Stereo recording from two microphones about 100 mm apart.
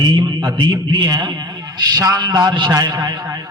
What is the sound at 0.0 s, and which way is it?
A man's voice, 45° right (ahead or behind).